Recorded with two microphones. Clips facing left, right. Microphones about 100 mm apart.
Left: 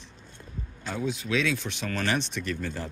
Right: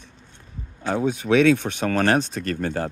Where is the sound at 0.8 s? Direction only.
65° right (ahead or behind); by 2.6 s 45° right (ahead or behind).